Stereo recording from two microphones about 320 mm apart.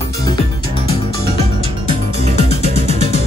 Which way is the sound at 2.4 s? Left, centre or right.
Centre.